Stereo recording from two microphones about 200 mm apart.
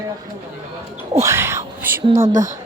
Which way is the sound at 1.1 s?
15° right (ahead or behind).